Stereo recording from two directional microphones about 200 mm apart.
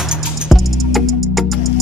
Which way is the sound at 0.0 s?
Centre (ahead or behind).